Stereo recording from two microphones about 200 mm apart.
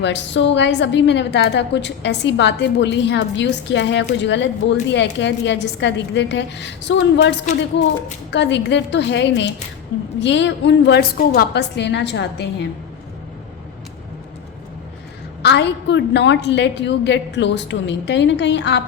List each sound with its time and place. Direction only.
0.0 s a woman's voice: 65° left (ahead or behind)
15.4 s a woman's voice: 60° left (ahead or behind)